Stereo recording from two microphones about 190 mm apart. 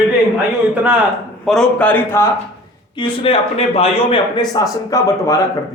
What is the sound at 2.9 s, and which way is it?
A man's voice, 30° left (ahead or behind).